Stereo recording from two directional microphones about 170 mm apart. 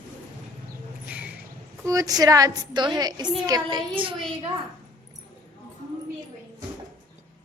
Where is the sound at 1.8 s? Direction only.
20° right (ahead or behind).